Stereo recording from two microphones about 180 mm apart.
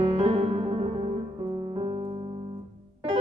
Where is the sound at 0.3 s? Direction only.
30° right (ahead or behind).